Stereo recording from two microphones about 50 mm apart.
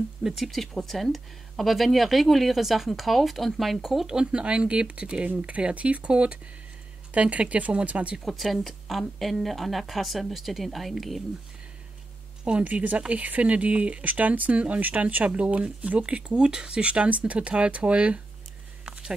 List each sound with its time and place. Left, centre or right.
0.2 s speech: centre
0.5 s speech: centre
4.1 s speech: centre
8.3 s speech: centre
12.4 s speech: right
18.9 s a sound: centre